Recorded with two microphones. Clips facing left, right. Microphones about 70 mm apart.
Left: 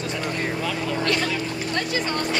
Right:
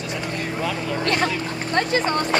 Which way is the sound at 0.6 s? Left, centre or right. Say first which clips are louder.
Right 1 dB; centre.